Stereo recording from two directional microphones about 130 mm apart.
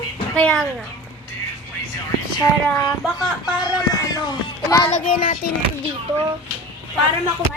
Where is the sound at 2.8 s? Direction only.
30° left (ahead or behind).